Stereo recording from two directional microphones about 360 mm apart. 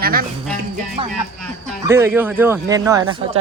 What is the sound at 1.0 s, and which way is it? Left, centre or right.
Speech, centre.